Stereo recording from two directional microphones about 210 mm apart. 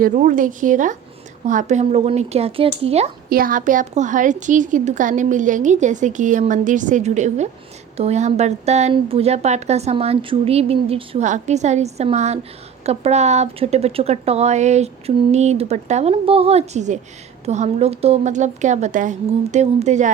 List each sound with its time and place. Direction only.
0.0 s speech: 40° right (ahead or behind)
3.2 s speech: 45° right (ahead or behind)